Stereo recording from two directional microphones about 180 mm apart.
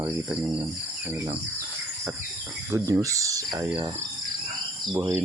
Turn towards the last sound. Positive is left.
turn(degrees=-20)  # may be behind; listen again after turning